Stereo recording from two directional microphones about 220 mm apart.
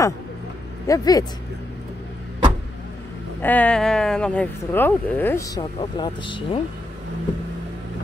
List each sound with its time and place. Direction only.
0.8 s speech: 15° left (ahead or behind)
3.4 s speech: 5° left (ahead or behind); by 6.6 s 20° left (ahead or behind)